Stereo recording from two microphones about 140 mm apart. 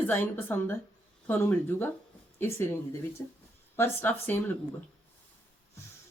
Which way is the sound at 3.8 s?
15° left (ahead or behind).